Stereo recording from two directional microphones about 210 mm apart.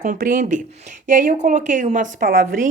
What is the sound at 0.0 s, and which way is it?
Speech, 40° right (ahead or behind).